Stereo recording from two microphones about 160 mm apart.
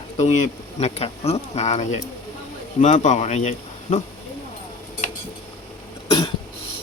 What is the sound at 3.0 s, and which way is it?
Speech, 50° left (ahead or behind).